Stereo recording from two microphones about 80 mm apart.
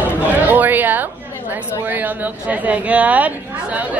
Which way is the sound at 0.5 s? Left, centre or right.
Right.